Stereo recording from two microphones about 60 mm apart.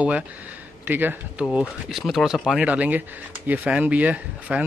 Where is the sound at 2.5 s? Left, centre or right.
Centre.